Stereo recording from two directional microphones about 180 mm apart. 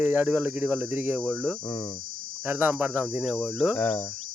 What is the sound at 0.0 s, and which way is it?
Cricket, 10° right (ahead or behind).